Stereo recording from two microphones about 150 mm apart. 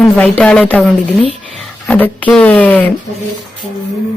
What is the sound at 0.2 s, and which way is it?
Speech, 5° left (ahead or behind).